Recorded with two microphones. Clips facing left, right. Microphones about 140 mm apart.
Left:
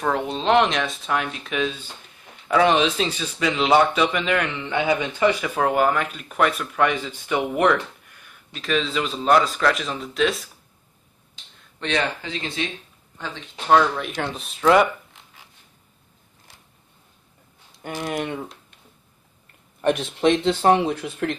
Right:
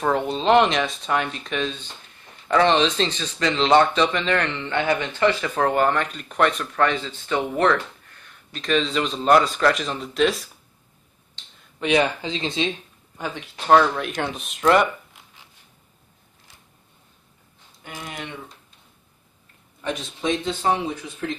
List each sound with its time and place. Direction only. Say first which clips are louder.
0.0 s speech: right 2 dB; centre (ahead or behind)
11.8 s speech: right 5 dB; 15° right (ahead or behind)
13.7 s speech: right 1 dB; centre (ahead or behind)
18.0 s speech: left 9 dB; 45° left (ahead or behind)
19.8 s speech: left 8 dB; 65° left (ahead or behind)